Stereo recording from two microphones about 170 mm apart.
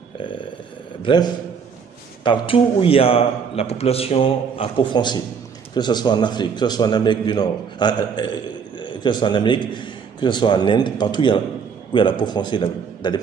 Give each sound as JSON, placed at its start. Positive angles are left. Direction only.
{"t": 1.0, "sound": "a man's voice", "side_deg": 25}